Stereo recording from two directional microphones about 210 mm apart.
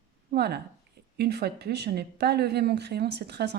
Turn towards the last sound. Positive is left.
turn(degrees=-50)  # may be behind; listen again after turning